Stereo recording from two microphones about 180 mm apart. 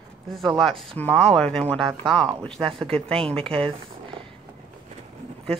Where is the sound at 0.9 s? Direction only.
5° left (ahead or behind).